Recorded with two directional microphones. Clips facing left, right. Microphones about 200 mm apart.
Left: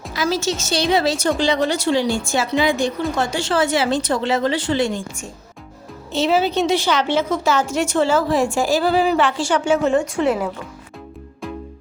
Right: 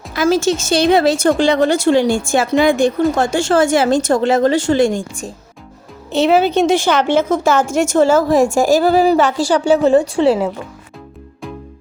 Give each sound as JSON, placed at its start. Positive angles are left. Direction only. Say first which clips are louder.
{"t": 0.1, "sound": "a woman's voice", "louder": "right 7 dB", "side_deg": -50}
{"t": 6.1, "sound": "a woman's voice", "louder": "right 5 dB", "side_deg": -60}